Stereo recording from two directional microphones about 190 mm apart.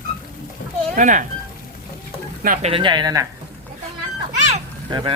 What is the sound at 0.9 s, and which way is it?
Speech, 40° right (ahead or behind).